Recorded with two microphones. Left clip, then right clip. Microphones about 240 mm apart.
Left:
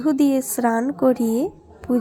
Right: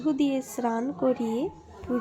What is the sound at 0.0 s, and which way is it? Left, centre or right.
Speech, left.